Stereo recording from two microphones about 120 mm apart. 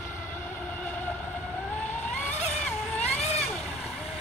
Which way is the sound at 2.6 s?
10° left (ahead or behind).